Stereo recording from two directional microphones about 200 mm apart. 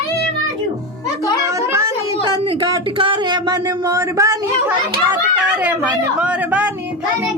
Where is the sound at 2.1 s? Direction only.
20° left (ahead or behind).